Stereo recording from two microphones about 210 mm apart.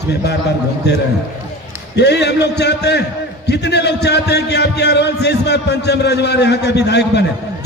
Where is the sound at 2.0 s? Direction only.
55° left (ahead or behind).